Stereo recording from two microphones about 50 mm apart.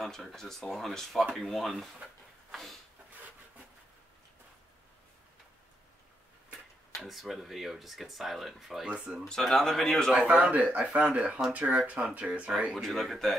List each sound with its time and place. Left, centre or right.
0.0 s speech: centre
7.0 s speech: centre
8.8 s speech: right
9.3 s speech: centre
10.1 s speech: right
12.7 s speech: centre